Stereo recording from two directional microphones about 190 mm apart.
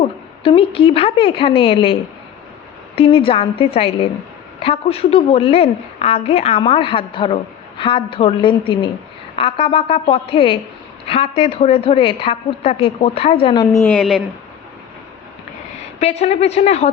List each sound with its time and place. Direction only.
0.0 s a woman's voice: 30° left (ahead or behind); by 14.0 s 15° left (ahead or behind)
16.0 s a woman's voice: 35° left (ahead or behind)